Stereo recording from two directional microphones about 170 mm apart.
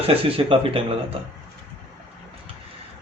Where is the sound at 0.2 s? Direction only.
35° right (ahead or behind).